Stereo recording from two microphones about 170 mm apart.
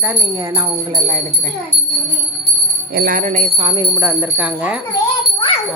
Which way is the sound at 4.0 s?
10° right (ahead or behind).